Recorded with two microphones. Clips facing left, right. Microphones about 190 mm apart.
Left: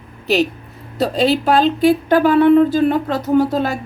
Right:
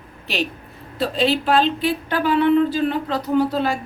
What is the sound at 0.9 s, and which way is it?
Speech, 40° left (ahead or behind).